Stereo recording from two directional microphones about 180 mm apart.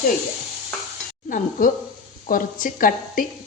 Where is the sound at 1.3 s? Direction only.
50° left (ahead or behind).